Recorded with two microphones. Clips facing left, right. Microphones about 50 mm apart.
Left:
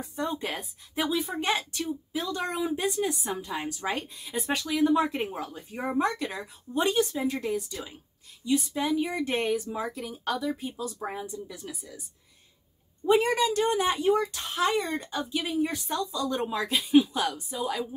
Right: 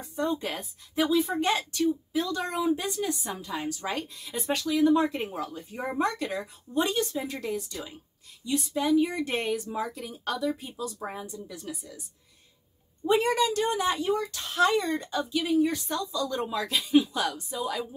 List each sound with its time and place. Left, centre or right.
0.0 s a woman's voice: centre
6.0 s a woman's voice: centre
13.0 s a woman's voice: centre